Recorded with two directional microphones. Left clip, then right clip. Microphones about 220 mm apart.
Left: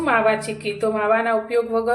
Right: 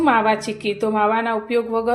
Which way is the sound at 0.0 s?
35° right (ahead or behind).